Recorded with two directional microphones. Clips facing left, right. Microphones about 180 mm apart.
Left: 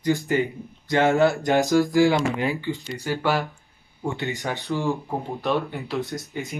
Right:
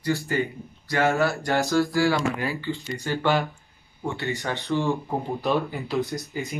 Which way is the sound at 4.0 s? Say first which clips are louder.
Left 1 dB; 15° left (ahead or behind).